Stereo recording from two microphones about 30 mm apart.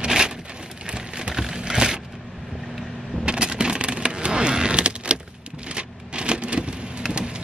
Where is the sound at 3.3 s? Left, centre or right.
Right.